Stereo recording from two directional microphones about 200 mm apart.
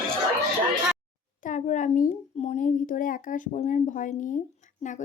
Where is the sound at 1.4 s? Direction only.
40° left (ahead or behind).